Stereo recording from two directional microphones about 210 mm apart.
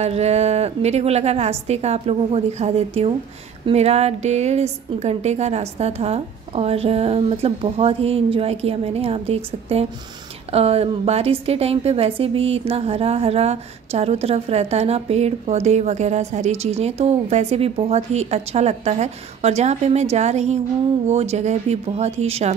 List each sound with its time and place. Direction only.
0.0 s a woman's voice: 30° right (ahead or behind)